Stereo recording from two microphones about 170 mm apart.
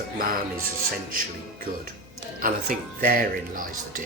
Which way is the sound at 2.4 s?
55° right (ahead or behind).